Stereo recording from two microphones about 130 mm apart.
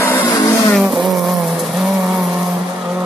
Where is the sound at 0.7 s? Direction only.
Centre (ahead or behind).